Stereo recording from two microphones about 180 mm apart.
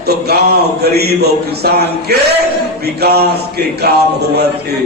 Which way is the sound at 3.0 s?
60° right (ahead or behind).